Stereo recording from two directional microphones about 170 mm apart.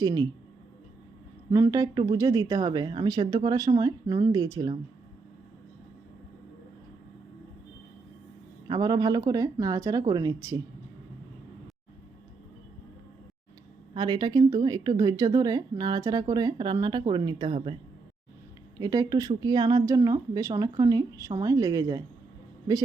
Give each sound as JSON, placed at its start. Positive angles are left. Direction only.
{"t": 0.0, "sound": "speech", "side_deg": -20}
{"t": 1.5, "sound": "speech", "side_deg": -20}
{"t": 8.6, "sound": "speech", "side_deg": -25}
{"t": 13.9, "sound": "speech", "side_deg": -25}
{"t": 18.8, "sound": "speech", "side_deg": -25}